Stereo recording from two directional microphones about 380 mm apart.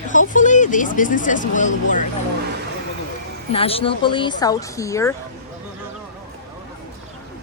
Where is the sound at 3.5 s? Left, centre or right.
Centre.